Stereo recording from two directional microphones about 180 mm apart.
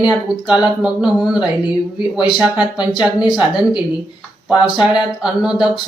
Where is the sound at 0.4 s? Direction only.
5° right (ahead or behind).